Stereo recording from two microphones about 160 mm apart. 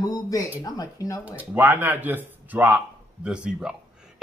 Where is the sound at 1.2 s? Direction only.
10° right (ahead or behind).